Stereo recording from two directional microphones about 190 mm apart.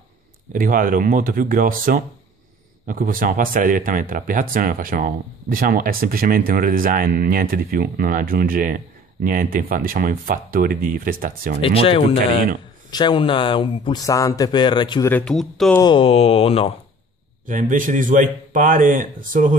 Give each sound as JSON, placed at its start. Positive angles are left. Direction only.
{"t": 0.5, "sound": "speech", "side_deg": -45}
{"t": 11.6, "sound": "speech", "side_deg": 30}
{"t": 15.0, "sound": "speech", "side_deg": 5}
{"t": 15.8, "sound": "speech", "side_deg": 25}
{"t": 17.5, "sound": "speech", "side_deg": -45}